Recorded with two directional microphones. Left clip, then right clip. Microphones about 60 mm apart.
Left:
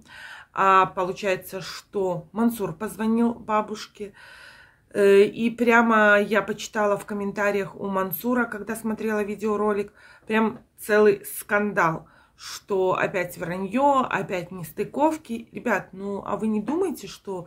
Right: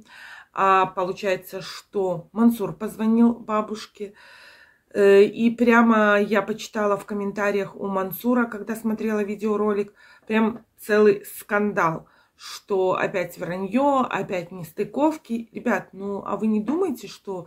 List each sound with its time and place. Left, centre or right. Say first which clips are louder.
0.2 s speech: even; left